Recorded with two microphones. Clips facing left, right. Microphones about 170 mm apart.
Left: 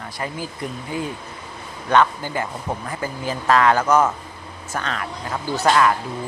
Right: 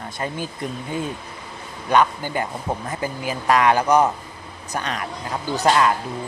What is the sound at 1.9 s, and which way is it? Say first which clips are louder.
Speech: even; 15° right (ahead or behind).